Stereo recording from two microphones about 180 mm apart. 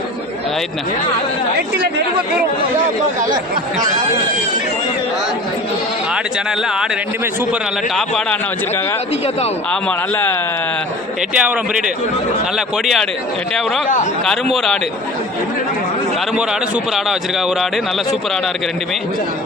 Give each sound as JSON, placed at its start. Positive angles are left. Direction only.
{"t": 3.2, "sound": "speech", "side_deg": -45}
{"t": 7.9, "sound": "a man's voice", "side_deg": 5}
{"t": 11.3, "sound": "a man's voice", "side_deg": -5}
{"t": 14.5, "sound": "a man's voice", "side_deg": 0}
{"t": 16.3, "sound": "a man's voice", "side_deg": 0}